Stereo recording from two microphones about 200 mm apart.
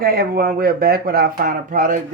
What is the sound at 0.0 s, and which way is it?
Speech, 50° right (ahead or behind).